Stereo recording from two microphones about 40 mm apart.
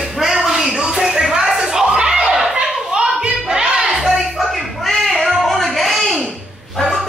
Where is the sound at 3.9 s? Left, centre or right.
Centre.